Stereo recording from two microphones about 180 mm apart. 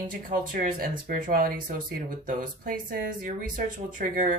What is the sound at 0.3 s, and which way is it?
Speech, 50° right (ahead or behind).